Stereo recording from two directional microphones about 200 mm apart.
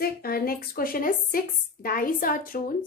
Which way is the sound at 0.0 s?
50° left (ahead or behind).